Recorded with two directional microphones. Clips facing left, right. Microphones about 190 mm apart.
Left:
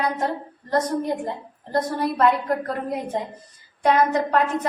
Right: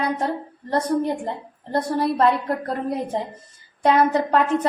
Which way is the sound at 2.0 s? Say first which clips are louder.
Right 1 dB; 30° right (ahead or behind).